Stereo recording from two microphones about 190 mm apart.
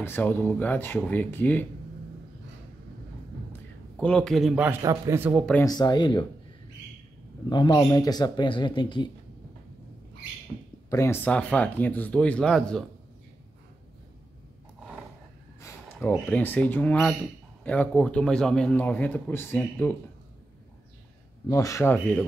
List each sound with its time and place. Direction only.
0.0 s a man's voice: 10° left (ahead or behind)
3.9 s a man's voice: 5° left (ahead or behind)
4.8 s a man's voice: 15° right (ahead or behind)
5.5 s speech: 15° left (ahead or behind)
7.4 s speech: 20° left (ahead or behind)
10.9 s a man's voice: 15° left (ahead or behind)
15.6 s a man's voice: 10° left (ahead or behind)
21.5 s a man's voice: 15° left (ahead or behind)